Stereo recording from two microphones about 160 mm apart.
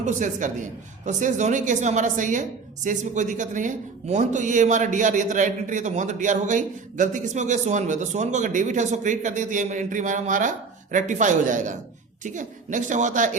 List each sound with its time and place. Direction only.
0.0 s a man's voice: 50° right (ahead or behind)